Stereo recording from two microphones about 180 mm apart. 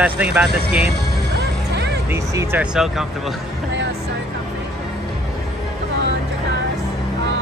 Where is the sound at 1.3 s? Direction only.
70° right (ahead or behind).